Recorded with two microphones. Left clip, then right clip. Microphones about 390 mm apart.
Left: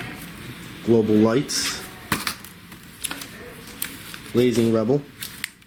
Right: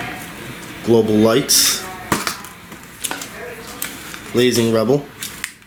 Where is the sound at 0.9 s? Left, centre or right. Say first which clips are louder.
Right 5 dB; centre.